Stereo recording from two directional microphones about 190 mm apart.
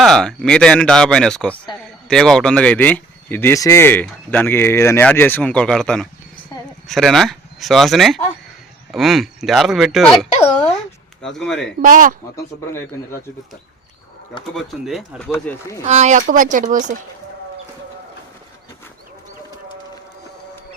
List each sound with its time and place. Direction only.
0.0 s speech: centre (ahead or behind)
11.8 s speech: 45° right (ahead or behind)
14.5 s speech: centre (ahead or behind)
15.3 s speech: 15° left (ahead or behind)
15.9 s speech: 40° right (ahead or behind)